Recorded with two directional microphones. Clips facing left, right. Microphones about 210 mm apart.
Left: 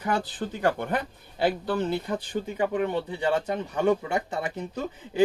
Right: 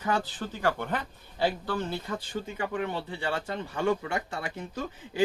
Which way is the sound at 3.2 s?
20° left (ahead or behind).